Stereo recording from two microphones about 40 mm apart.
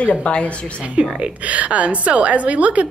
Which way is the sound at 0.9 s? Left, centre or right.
Right.